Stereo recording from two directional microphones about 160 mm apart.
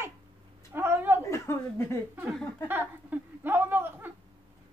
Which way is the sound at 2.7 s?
10° right (ahead or behind).